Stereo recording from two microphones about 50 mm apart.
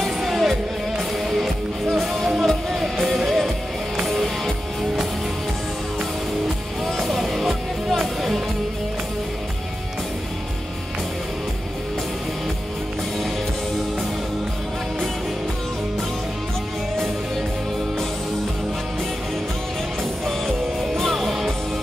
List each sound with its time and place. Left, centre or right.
0.2 s music: centre
7.0 s music: centre
20.2 s music: centre